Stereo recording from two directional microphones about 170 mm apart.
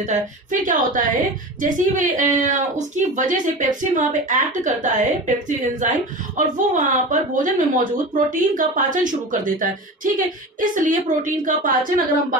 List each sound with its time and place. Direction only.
0.0 s speech: 50° right (ahead or behind)